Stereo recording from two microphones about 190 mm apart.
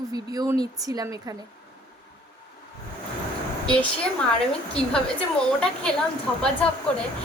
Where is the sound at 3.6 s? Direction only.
5° left (ahead or behind).